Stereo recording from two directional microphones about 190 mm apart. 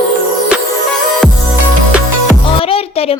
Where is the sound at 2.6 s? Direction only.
30° left (ahead or behind).